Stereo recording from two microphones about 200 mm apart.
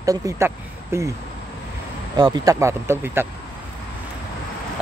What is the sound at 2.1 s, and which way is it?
Speech, 20° right (ahead or behind).